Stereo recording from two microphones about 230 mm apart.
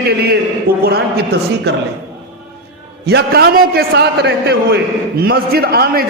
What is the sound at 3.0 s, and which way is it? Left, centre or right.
A man's voice, right.